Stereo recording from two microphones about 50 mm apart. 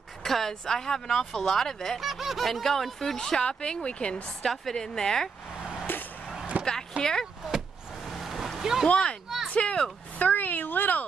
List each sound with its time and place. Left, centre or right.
0.2 s speech: centre
2.0 s speech: centre
4.5 s speech: centre
5.9 s vehicle: left
6.5 s a sound: right
7.0 s speech: centre
7.5 s vehicle: centre
8.8 s speech: left
9.5 s a sound: left
10.2 s speech: left